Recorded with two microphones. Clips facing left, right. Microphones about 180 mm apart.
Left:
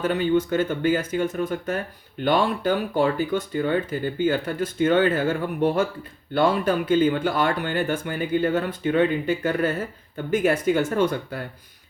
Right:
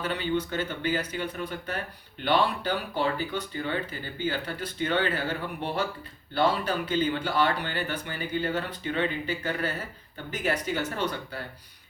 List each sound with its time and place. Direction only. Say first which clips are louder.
0.0 s speech: left 7 dB; 50° left (ahead or behind)